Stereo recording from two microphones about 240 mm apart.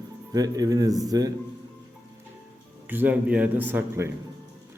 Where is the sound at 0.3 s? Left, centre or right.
Centre.